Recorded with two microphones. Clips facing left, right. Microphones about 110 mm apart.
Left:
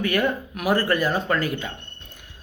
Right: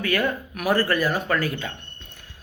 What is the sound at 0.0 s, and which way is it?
A man's voice, 20° left (ahead or behind).